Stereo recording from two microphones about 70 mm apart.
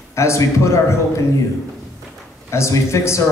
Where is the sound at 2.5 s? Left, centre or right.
Left.